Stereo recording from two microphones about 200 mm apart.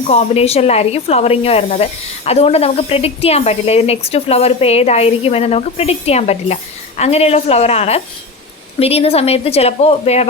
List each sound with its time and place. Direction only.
0.1 s speech: 30° left (ahead or behind)